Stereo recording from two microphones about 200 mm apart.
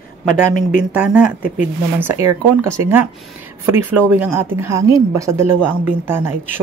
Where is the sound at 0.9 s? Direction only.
5° right (ahead or behind).